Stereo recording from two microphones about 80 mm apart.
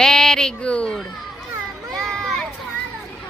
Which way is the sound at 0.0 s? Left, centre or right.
Centre.